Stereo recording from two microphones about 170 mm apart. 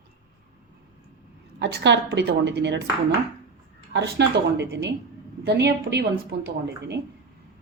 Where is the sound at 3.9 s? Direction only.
90° right.